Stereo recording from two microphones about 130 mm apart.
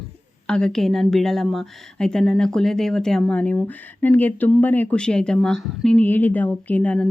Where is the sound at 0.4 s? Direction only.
5° left (ahead or behind).